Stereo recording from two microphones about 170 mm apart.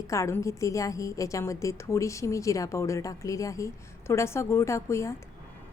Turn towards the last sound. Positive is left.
turn(degrees=15)  # may be behind; listen again after turning